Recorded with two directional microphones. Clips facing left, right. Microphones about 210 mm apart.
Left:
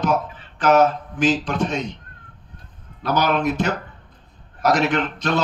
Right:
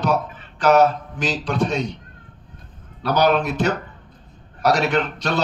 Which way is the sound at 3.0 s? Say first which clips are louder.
Right 2 dB; 35° right (ahead or behind).